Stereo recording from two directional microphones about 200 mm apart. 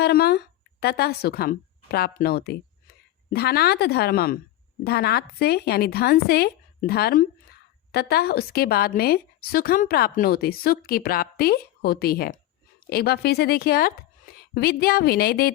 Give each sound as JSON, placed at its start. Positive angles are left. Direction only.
{"t": 0.0, "sound": "a woman's voice", "side_deg": 50}